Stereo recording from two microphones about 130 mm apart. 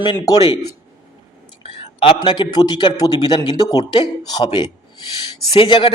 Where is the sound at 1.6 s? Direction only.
40° left (ahead or behind).